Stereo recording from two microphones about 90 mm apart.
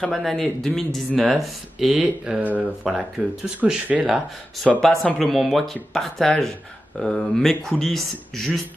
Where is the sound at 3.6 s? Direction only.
15° right (ahead or behind).